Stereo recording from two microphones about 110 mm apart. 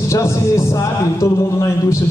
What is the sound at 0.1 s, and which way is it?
Music, 25° left (ahead or behind).